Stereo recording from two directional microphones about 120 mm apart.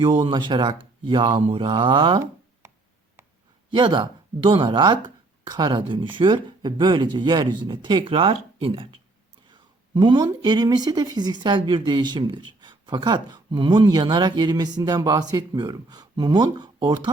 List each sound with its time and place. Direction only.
0.0 s speech: 40° right (ahead or behind)
3.7 s speech: 40° right (ahead or behind)